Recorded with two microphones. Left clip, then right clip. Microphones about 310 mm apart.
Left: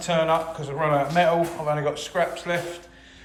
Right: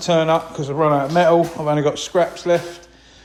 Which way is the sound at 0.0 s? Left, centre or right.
Centre.